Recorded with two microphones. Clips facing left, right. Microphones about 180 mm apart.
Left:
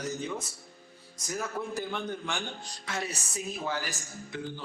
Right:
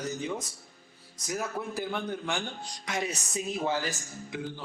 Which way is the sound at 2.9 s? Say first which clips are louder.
Right 3 dB; 15° right (ahead or behind).